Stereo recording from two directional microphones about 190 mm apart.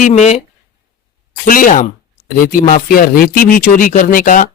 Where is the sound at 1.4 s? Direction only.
45° left (ahead or behind).